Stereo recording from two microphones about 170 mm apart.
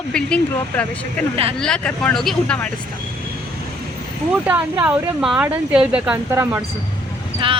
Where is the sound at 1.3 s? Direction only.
35° right (ahead or behind).